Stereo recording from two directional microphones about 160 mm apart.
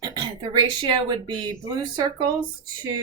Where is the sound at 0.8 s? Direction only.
25° right (ahead or behind).